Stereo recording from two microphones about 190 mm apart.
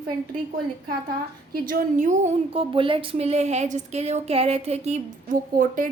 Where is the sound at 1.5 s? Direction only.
50° right (ahead or behind).